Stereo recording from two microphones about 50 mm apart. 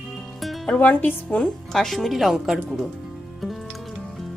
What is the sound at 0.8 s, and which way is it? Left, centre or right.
Speech, left.